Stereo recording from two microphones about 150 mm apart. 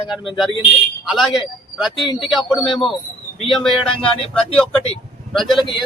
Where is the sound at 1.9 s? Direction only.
30° left (ahead or behind).